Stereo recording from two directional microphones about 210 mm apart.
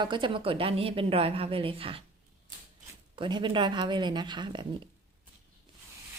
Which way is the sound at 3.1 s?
20° right (ahead or behind).